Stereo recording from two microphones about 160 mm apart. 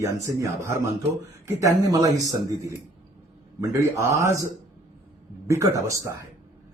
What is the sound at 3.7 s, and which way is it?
Speech, 15° right (ahead or behind).